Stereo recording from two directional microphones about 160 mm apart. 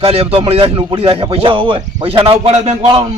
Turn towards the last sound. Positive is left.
turn(degrees=-30)  # may be behind; listen again after turning